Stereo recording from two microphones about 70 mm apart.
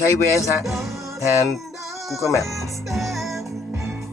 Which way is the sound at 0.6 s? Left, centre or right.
Centre.